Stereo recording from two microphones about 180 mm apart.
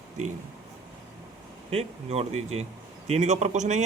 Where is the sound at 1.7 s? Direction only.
35° right (ahead or behind).